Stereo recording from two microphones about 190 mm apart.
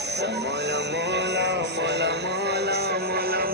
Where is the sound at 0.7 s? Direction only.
65° right (ahead or behind).